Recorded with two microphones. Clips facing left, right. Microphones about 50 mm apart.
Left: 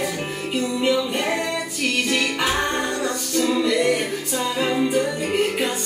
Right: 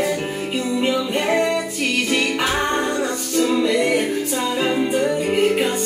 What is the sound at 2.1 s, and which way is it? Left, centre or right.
Music, centre.